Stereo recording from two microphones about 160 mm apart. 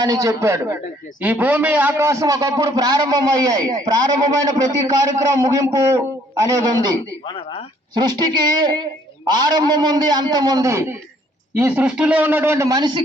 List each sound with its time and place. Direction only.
0.0 s a man's voice: 20° right (ahead or behind)
7.3 s speech: 35° left (ahead or behind)
7.9 s a man's voice: 25° right (ahead or behind)